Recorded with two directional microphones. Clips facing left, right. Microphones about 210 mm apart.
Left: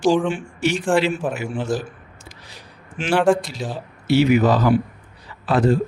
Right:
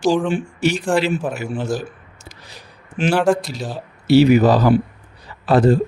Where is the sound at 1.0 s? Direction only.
5° right (ahead or behind).